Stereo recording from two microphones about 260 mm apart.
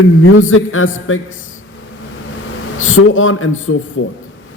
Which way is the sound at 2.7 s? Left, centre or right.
Left.